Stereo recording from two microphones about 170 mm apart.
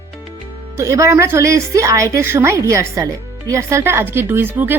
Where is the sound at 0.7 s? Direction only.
20° right (ahead or behind).